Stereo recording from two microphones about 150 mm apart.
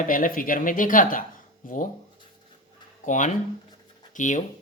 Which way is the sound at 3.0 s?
55° left (ahead or behind).